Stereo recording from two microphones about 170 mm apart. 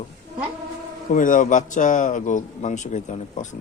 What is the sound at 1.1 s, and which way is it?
A man's voice, 50° left (ahead or behind).